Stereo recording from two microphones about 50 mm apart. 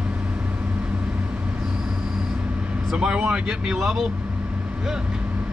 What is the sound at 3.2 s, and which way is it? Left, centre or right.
Speech, centre.